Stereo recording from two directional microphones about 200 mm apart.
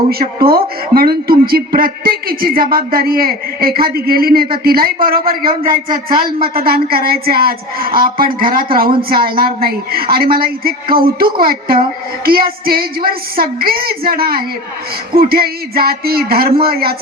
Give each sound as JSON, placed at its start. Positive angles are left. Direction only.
{"t": 0.1, "sound": "a man's voice", "side_deg": -50}